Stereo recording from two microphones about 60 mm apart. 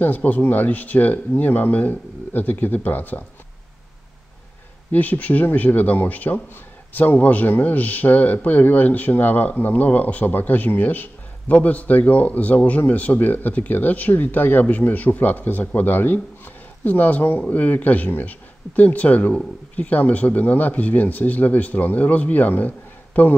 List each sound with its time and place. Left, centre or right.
0.0 s speech: left
4.9 s speech: left